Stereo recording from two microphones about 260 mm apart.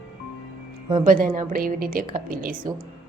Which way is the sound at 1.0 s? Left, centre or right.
Right.